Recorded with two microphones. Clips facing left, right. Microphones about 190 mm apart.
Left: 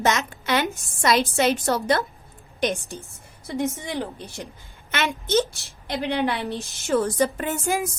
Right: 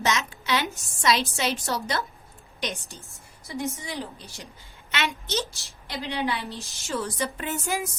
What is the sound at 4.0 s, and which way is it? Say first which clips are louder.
A woman's voice: left 6 dB; 55° left (ahead or behind).